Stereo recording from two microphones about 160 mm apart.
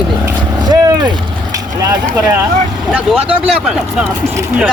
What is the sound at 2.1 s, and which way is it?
Speech, 15° right (ahead or behind).